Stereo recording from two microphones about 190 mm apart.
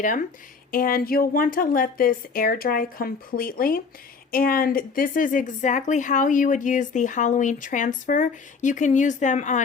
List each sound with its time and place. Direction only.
0.0 s speech: 45° left (ahead or behind)